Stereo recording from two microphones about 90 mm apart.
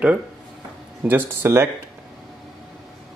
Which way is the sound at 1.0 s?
25° right (ahead or behind).